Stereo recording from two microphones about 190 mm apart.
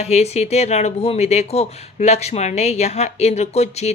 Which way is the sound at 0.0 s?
35° left (ahead or behind).